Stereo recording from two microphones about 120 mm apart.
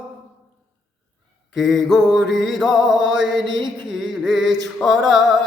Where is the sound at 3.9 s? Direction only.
5° right (ahead or behind).